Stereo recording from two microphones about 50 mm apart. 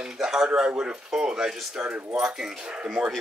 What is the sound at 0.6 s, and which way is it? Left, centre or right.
A man's voice, centre.